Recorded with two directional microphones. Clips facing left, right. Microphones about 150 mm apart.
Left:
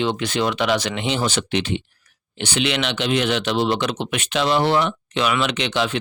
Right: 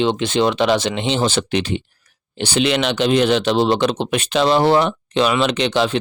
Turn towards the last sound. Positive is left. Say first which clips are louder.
# right 5 dB
turn(degrees=-35)  # may be behind; listen again after turning